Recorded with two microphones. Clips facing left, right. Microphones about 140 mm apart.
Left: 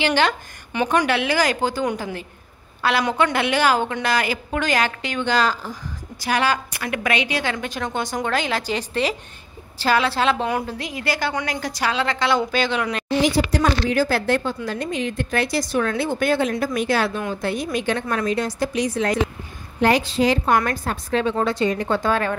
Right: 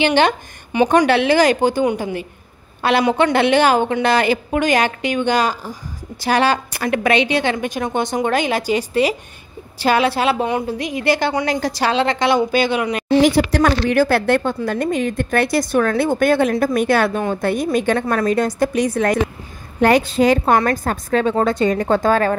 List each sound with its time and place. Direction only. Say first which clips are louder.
0.0 s a woman's voice: right 5 dB; 20° right (ahead or behind)
0.8 s a woman's voice: right 6 dB; 35° right (ahead or behind); by 5.8 s 15° right (ahead or behind)
6.1 s a woman's voice: right 5 dB; 30° right (ahead or behind); by 13.0 s 15° right (ahead or behind)
13.2 s a woman's voice: right 4 dB; 70° right (ahead or behind); by 22.4 s 45° right (ahead or behind)